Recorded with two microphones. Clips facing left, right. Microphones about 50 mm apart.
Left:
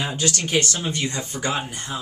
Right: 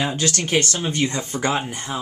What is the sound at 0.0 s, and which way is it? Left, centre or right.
Speech, right.